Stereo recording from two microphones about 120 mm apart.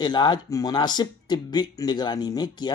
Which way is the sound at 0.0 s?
35° left (ahead or behind).